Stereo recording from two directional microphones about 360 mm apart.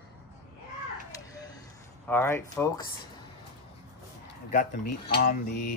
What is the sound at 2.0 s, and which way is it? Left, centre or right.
Speech, centre.